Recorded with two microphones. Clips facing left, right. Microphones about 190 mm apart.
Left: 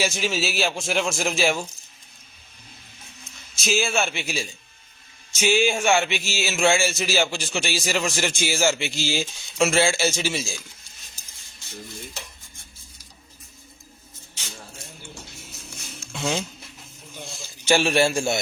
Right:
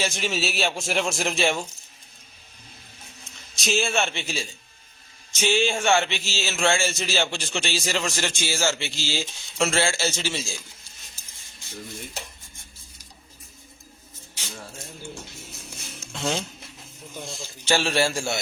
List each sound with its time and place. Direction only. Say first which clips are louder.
0.0 s a man's voice: left 2 dB; 5° left (ahead or behind)
3.5 s a man's voice: left 1 dB; 5° left (ahead or behind)
16.1 s speech: left 1 dB; 5° left (ahead or behind)
17.7 s speech: left 3 dB; 15° left (ahead or behind)